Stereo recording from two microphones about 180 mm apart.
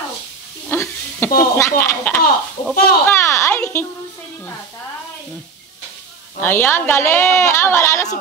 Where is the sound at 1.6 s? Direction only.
15° left (ahead or behind).